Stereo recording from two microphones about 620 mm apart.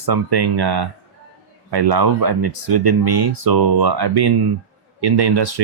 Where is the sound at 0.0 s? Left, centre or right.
Right.